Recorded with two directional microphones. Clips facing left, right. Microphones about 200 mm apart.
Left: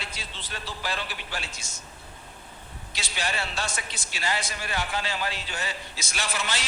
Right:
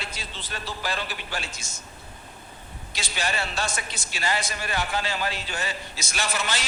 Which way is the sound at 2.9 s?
45° right (ahead or behind).